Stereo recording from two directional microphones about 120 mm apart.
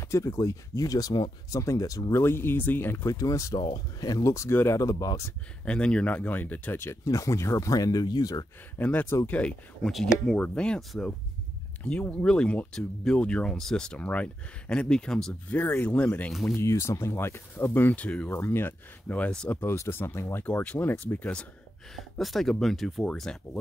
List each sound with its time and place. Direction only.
0.0 s speech: 25° left (ahead or behind)
3.5 s speech: 40° left (ahead or behind)
5.7 s speech: 10° left (ahead or behind); by 8.5 s 35° left (ahead or behind)
8.7 s speech: 15° left (ahead or behind)
16.3 s speech: centre (ahead or behind)
16.5 s speech: 25° left (ahead or behind)
18.3 s speech: 20° left (ahead or behind)